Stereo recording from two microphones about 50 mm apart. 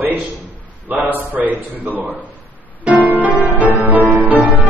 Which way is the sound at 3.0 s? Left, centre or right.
Right.